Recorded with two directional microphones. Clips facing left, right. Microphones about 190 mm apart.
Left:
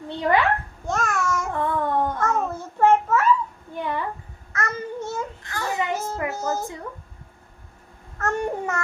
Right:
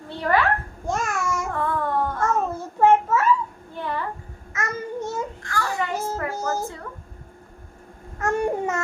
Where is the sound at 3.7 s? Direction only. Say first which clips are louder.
Left 1 dB; 15° left (ahead or behind).